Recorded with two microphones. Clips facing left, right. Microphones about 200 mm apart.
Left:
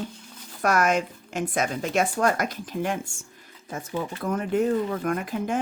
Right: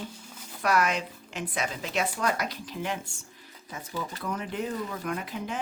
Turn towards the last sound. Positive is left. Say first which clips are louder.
# left 6 dB
turn(degrees=50)  # may be behind; listen again after turning